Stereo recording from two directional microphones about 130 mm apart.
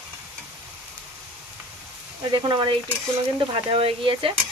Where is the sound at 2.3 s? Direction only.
35° right (ahead or behind).